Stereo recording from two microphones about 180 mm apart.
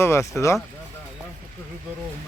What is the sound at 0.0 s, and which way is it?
Speech, 15° left (ahead or behind).